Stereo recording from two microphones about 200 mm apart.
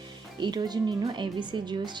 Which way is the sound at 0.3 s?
20° right (ahead or behind).